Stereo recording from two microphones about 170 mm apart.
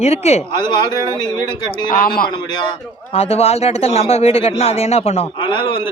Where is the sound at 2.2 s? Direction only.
25° left (ahead or behind).